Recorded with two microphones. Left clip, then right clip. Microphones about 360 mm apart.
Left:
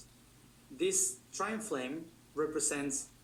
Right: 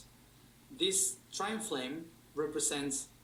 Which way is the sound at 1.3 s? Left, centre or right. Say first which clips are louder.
Even; centre.